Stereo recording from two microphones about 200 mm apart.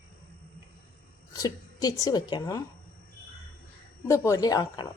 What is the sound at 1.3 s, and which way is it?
A woman's voice, 20° left (ahead or behind).